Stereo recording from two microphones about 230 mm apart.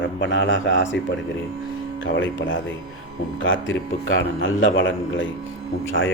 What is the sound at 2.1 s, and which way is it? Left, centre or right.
A man's voice, left.